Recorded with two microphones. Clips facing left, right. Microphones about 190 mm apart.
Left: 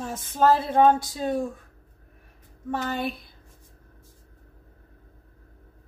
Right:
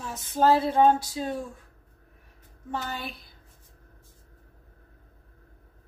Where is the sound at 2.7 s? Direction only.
55° left (ahead or behind).